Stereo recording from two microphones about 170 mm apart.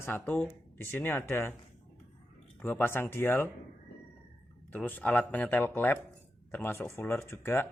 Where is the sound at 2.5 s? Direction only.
10° left (ahead or behind).